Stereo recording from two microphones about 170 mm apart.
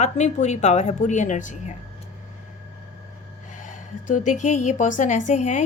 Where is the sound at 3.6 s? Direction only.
50° left (ahead or behind).